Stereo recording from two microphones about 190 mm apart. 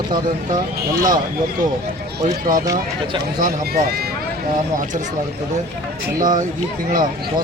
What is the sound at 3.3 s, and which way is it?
Speech, 50° right (ahead or behind).